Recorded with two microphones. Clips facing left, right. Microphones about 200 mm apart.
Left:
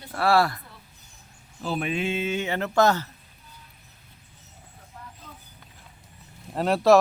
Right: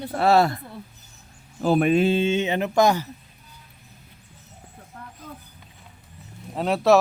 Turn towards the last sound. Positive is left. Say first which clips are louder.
# even
turn(degrees=0)  # may be behind; listen again after turning